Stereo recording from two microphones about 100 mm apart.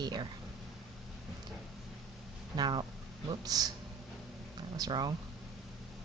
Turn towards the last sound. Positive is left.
turn(degrees=-45)  # may be behind; listen again after turning